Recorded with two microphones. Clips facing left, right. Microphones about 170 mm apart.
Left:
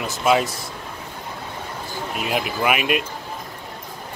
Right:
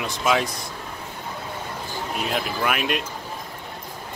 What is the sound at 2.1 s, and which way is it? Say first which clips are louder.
Speech: left 2 dB; 5° left (ahead or behind).